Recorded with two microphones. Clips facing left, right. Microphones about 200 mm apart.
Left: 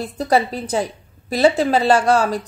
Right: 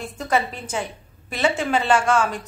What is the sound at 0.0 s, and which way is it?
A woman's voice, 35° left (ahead or behind).